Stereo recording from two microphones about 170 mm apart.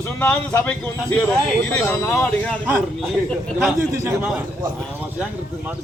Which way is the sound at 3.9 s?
15° right (ahead or behind).